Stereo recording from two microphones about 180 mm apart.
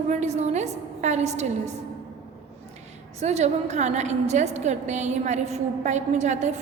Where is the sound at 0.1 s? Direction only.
40° right (ahead or behind).